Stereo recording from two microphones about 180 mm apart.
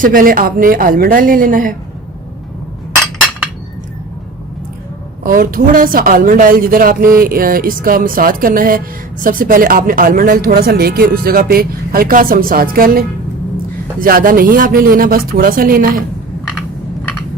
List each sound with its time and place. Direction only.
0.0 s speech: 50° right (ahead or behind)
3.0 s hammer: 5° left (ahead or behind)
5.2 s speech: 50° right (ahead or behind)